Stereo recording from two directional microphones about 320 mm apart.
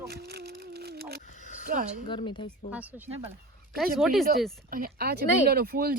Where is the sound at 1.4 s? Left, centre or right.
Left.